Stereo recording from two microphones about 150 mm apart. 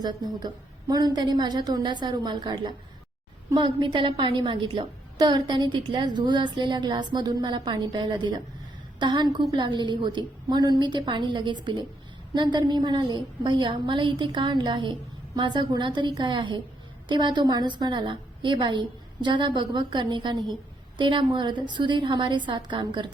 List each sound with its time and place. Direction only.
0.0 s a woman's voice: 30° right (ahead or behind)